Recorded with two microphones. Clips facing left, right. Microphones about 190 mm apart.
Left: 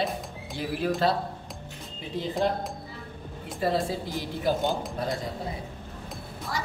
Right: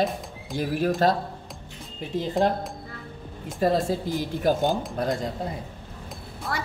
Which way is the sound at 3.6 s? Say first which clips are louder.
Right 4 dB; 45° right (ahead or behind).